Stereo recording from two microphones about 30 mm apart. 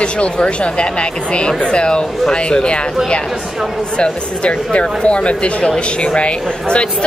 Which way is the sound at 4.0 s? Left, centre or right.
Left.